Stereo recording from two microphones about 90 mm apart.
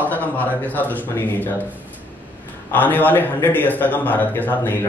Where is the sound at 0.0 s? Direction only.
20° left (ahead or behind).